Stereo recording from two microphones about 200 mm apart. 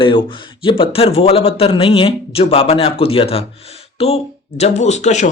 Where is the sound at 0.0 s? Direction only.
25° left (ahead or behind).